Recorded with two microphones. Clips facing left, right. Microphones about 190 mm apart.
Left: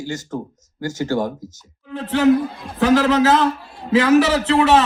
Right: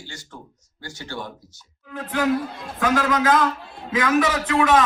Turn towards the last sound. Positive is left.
turn(degrees=30)  # may be behind; listen again after turning